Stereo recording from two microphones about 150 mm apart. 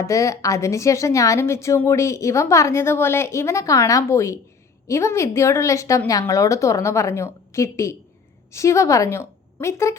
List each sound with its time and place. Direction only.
0.0 s a woman's voice: 20° left (ahead or behind)